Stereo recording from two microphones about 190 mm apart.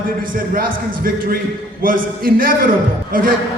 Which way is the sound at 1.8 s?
50° right (ahead or behind).